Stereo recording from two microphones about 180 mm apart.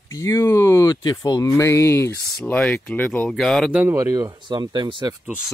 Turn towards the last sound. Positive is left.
turn(degrees=-5)  # may be behind; listen again after turning